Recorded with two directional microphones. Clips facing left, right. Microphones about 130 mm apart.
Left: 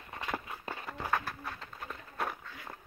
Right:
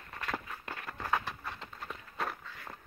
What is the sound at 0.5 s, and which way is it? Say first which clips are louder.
Walk: left 2 dB; 20° left (ahead or behind).